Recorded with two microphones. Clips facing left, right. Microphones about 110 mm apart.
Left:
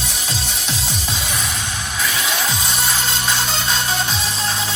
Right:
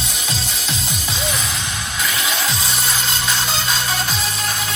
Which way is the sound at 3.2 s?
25° left (ahead or behind).